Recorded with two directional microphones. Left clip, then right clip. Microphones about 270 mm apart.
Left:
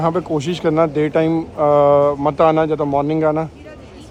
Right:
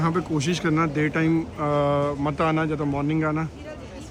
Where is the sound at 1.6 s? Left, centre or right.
Left.